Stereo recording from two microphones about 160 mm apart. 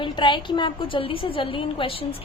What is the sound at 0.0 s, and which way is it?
A woman's voice, 30° left (ahead or behind).